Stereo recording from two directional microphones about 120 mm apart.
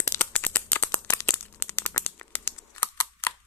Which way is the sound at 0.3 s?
15° left (ahead or behind).